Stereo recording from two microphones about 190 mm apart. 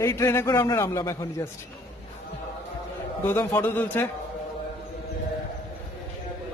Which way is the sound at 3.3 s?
10° left (ahead or behind).